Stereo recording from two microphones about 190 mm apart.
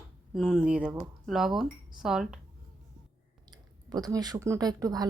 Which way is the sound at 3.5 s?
20° right (ahead or behind).